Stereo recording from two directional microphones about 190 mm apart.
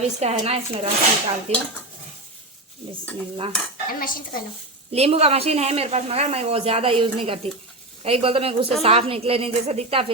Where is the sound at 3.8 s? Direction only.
50° left (ahead or behind).